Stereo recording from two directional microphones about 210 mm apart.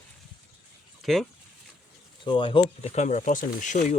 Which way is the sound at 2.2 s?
25° left (ahead or behind).